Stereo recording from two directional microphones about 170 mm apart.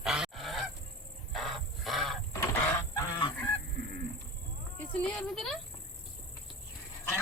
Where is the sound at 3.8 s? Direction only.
70° right (ahead or behind).